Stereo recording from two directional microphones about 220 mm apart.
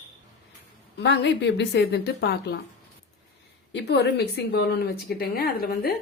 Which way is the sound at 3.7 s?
50° left (ahead or behind).